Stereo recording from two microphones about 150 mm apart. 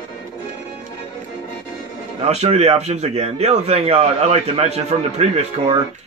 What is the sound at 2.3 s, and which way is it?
A man's voice, 45° right (ahead or behind).